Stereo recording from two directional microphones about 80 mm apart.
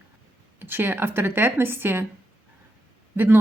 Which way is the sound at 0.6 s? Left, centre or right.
Right.